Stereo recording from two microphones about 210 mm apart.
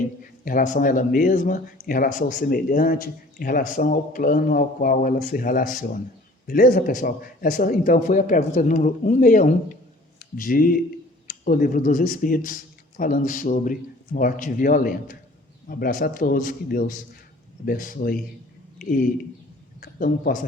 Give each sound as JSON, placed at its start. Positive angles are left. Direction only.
{"t": 0.4, "sound": "speech", "side_deg": 40}